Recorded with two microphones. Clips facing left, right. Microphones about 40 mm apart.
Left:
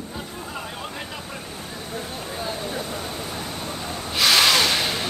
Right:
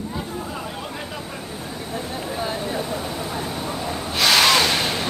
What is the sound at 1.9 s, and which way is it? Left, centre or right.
Vehicle, right.